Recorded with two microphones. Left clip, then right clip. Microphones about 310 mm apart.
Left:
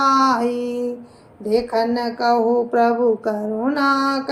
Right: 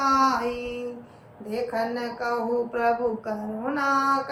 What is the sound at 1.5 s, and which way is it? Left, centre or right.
Speech, left.